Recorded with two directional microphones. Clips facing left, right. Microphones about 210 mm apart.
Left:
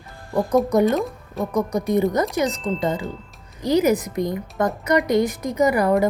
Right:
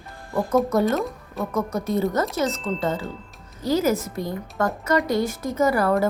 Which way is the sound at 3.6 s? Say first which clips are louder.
Left 3 dB; 15° left (ahead or behind).